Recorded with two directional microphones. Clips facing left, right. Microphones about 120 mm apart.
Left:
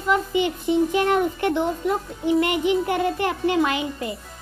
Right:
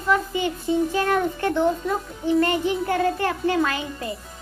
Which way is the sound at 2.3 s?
15° left (ahead or behind).